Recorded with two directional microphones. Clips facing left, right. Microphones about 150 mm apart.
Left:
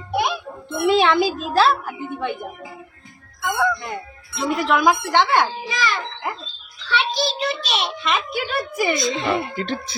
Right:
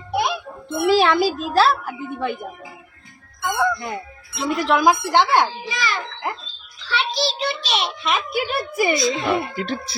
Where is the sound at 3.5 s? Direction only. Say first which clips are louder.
Even; 5° right (ahead or behind).